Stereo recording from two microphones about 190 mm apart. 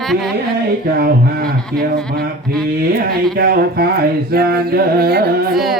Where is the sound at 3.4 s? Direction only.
55° right (ahead or behind).